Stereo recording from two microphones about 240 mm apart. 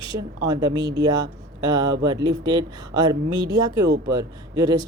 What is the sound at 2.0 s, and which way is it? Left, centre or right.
A man's voice, centre.